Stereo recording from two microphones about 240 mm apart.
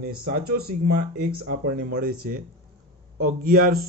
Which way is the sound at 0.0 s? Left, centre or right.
Right.